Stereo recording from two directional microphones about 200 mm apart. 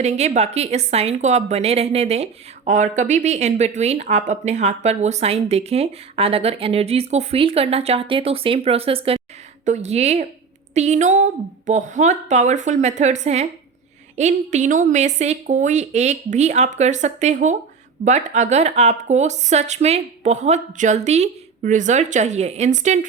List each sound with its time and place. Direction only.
0.0 s speech: 35° right (ahead or behind)